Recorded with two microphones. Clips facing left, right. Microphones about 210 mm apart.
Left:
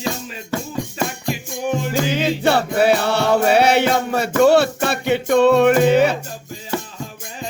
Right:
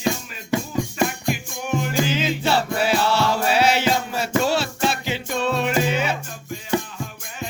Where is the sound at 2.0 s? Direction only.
60° left (ahead or behind).